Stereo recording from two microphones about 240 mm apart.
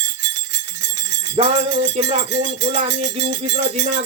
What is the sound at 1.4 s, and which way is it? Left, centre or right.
Music, right.